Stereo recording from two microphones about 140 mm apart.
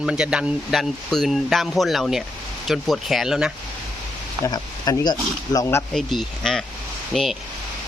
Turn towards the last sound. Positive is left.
turn(degrees=0)  # may be behind; listen again after turning